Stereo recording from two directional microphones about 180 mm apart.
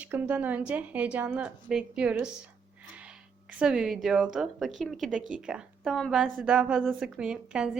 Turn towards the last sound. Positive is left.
turn(degrees=-5)  # may be behind; listen again after turning